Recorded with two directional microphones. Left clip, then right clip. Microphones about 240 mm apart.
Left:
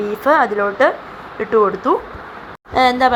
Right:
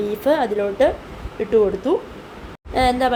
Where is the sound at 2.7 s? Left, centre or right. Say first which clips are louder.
Left 5 dB; centre.